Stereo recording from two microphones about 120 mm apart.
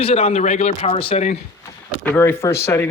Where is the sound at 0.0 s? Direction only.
55° left (ahead or behind).